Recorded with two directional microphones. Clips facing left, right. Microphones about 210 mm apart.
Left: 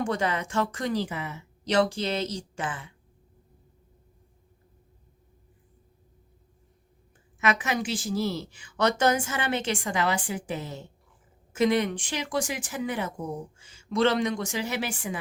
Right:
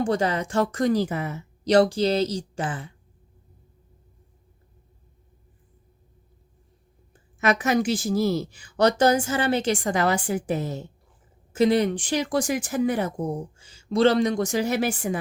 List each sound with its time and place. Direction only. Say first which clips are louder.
0.0 s speech: right 4 dB; 35° right (ahead or behind)
7.3 s speech: right 5 dB; 40° right (ahead or behind)